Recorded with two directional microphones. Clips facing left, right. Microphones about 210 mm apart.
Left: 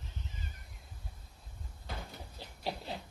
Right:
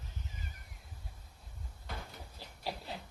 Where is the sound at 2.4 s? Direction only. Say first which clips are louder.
Left 2 dB; 20° left (ahead or behind).